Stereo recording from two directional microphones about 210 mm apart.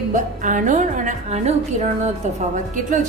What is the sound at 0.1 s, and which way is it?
A woman's voice, 40° right (ahead or behind).